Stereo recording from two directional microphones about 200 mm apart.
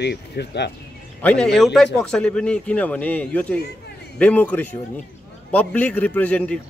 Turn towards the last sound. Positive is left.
turn(degrees=5)  # may be behind; listen again after turning